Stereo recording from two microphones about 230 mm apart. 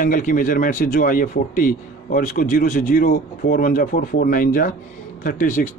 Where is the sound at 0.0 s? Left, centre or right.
Left.